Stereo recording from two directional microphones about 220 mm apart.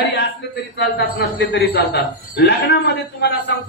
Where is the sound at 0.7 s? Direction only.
50° left (ahead or behind).